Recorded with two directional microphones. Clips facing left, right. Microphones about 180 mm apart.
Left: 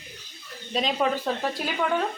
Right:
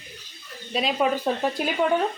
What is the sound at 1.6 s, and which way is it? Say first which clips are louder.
Speech: right 4 dB; 20° right (ahead or behind).